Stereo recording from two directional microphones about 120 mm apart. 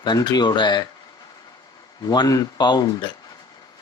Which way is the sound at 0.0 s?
35° left (ahead or behind).